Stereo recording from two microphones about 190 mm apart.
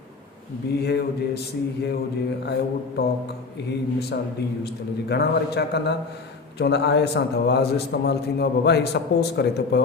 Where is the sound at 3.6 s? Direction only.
60° left (ahead or behind).